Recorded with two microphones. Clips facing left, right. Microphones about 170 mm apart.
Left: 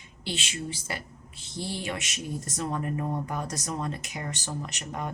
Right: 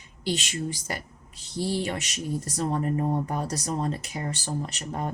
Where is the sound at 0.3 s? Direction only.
40° right (ahead or behind).